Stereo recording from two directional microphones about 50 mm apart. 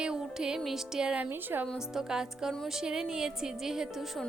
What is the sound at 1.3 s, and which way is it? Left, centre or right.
Speech, right.